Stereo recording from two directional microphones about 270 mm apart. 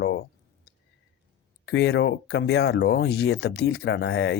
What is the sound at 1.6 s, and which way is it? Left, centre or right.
Speech, left.